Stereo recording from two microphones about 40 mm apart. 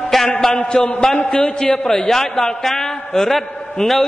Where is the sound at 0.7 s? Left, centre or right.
Centre.